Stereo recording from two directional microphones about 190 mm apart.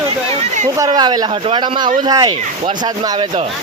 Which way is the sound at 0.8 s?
20° right (ahead or behind).